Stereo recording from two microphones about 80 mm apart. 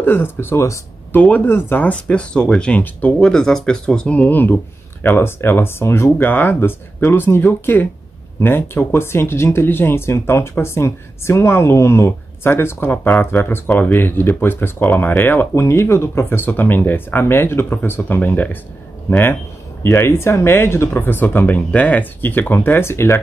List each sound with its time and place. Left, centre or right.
0.0 s speech: left
1.1 s speech: centre